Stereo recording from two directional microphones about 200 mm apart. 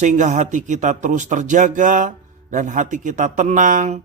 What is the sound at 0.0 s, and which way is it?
Speech, 35° right (ahead or behind).